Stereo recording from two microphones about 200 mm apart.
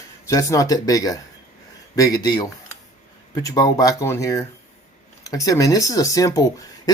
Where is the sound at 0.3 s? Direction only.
15° left (ahead or behind).